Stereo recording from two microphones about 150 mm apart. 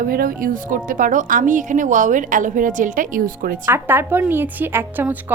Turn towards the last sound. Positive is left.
turn(degrees=-15)  # may be behind; listen again after turning